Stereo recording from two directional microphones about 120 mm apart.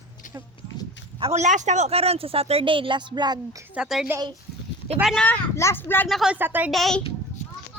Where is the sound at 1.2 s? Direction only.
60° right (ahead or behind); by 3.4 s 35° right (ahead or behind).